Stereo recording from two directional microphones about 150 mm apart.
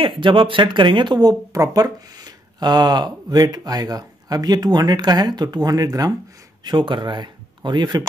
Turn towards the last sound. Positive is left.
turn(degrees=-30)  # may be behind; listen again after turning